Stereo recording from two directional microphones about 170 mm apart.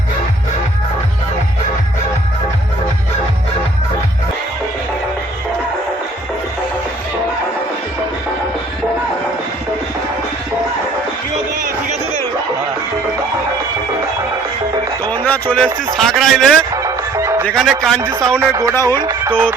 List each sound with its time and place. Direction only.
15.1 s a sound: 10° left (ahead or behind)
16.7 s music: 20° right (ahead or behind)
17.4 s a man's voice: centre (ahead or behind)
18.1 s a man's voice: 20° right (ahead or behind)
18.7 s speech: 15° left (ahead or behind)
18.9 s music: 20° right (ahead or behind)